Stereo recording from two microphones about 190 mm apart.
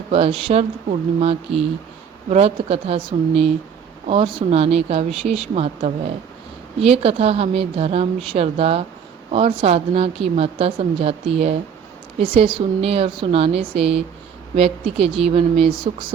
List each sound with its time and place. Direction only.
0.1 s a woman's voice: 30° right (ahead or behind)